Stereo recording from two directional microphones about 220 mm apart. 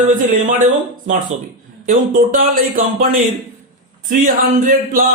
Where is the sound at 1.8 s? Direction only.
40° right (ahead or behind).